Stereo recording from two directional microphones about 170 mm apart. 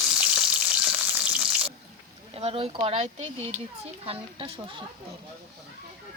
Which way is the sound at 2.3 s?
35° right (ahead or behind).